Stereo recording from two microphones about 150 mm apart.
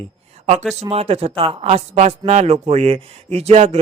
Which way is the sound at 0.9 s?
40° right (ahead or behind).